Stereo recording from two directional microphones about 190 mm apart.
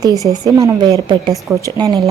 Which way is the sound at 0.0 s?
20° right (ahead or behind).